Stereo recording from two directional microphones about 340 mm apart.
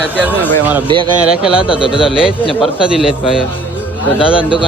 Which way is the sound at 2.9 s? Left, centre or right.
Centre.